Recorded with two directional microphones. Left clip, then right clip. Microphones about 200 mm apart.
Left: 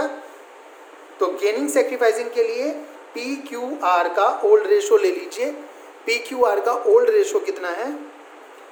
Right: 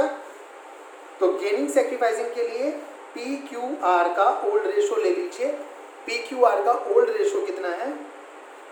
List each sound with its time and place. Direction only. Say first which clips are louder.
1.2 s a man's voice: left 2 dB; 50° left (ahead or behind)